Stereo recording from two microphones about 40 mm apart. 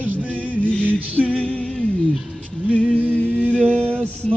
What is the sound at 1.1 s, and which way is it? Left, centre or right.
Music, right.